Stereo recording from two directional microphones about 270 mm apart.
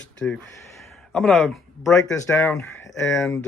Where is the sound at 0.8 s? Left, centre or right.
Centre.